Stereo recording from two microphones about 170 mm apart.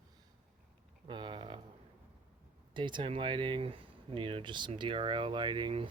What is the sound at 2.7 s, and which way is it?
Speech, 30° right (ahead or behind).